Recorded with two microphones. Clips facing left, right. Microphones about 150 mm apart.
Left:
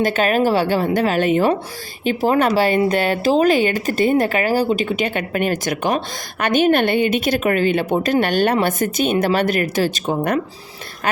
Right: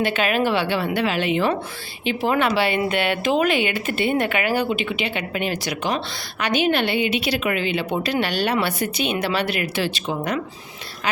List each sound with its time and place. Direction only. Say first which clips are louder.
0.0 s a woman's voice: left 4 dB; 40° left (ahead or behind)